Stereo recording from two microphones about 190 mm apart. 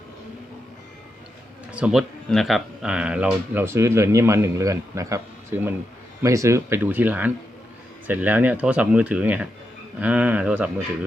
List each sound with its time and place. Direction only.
1.7 s speech: 5° right (ahead or behind)